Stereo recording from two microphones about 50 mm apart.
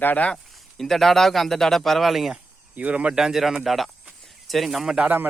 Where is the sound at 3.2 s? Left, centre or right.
Centre.